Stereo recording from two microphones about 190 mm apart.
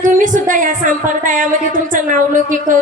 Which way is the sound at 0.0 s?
40° right (ahead or behind).